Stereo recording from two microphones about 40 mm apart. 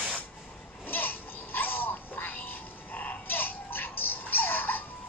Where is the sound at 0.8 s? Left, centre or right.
Left.